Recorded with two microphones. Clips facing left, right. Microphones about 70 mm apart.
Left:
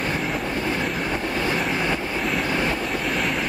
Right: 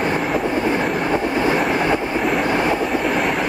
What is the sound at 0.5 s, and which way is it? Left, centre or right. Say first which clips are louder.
Train: right 6 dB; right.